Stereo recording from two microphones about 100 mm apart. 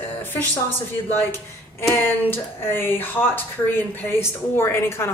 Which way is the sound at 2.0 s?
20° left (ahead or behind).